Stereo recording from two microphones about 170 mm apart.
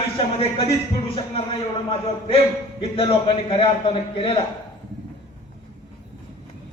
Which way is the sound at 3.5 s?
30° left (ahead or behind).